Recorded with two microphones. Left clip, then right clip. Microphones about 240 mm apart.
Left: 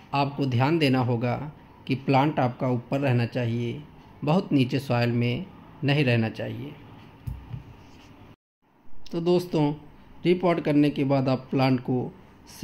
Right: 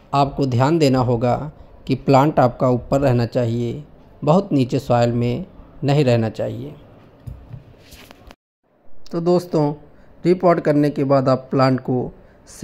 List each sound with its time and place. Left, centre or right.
0.1 s speech: right
9.1 s speech: centre